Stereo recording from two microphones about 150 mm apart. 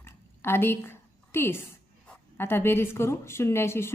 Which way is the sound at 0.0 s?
15° left (ahead or behind).